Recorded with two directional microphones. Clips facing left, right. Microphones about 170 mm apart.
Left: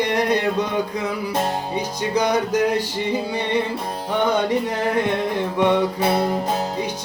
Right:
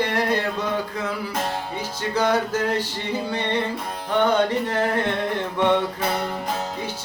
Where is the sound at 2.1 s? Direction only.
15° left (ahead or behind).